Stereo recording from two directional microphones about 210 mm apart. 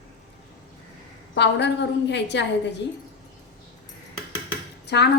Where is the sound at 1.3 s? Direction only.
55° left (ahead or behind).